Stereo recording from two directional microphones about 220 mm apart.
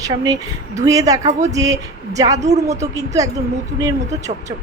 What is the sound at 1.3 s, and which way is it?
Speech, 30° right (ahead or behind).